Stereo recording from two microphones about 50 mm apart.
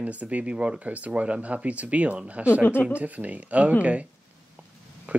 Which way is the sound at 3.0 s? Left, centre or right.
Right.